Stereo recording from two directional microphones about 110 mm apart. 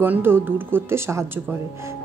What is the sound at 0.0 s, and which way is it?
A woman's voice, 20° right (ahead or behind).